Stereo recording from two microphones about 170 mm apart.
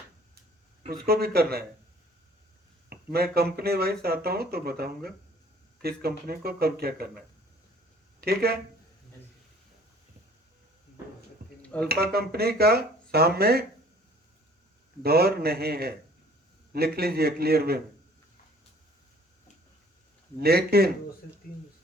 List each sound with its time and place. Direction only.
0.9 s speech: 65° right (ahead or behind)
2.9 s speech: 65° right (ahead or behind)
8.2 s speech: 65° right (ahead or behind)
11.6 s a sound: 10° left (ahead or behind)
11.9 s speech: 65° right (ahead or behind)
15.0 s speech: 65° right (ahead or behind)
20.4 s speech: 65° right (ahead or behind)
21.4 s speech: 60° left (ahead or behind)